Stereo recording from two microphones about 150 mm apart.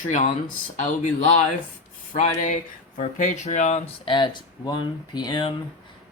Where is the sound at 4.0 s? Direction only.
30° left (ahead or behind).